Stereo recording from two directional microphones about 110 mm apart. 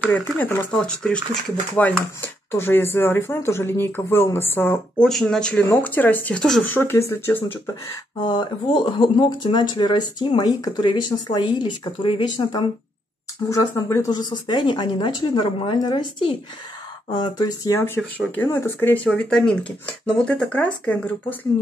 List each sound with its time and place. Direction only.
0.1 s speech: 15° left (ahead or behind)
4.9 s speech: 5° left (ahead or behind); by 7.7 s 25° left (ahead or behind)
8.2 s speech: 40° left (ahead or behind)
13.5 s speech: 25° left (ahead or behind)
14.1 s a woman's voice: 40° left (ahead or behind)
17.1 s a woman's voice: 40° left (ahead or behind)
17.7 s speech: 20° left (ahead or behind)
19.0 s speech: 5° left (ahead or behind)